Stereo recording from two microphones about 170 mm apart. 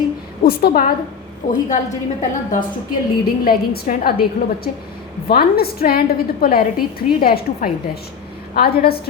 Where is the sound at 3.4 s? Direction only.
60° left (ahead or behind).